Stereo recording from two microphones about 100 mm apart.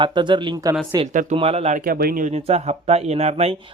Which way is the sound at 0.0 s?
50° right (ahead or behind).